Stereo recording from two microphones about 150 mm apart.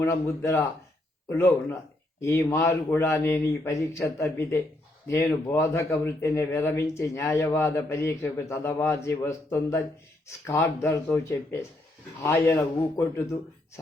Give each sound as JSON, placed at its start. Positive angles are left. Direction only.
{"t": 0.0, "sound": "speech", "side_deg": 15}